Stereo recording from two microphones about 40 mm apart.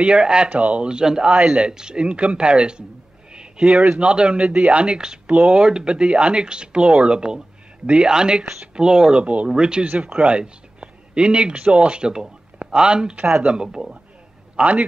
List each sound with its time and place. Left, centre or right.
0.0 s speech: right
0.5 s speech: right
0.8 s speech: centre
9.2 s speech: right
9.5 s speech: right
14.6 s speech: right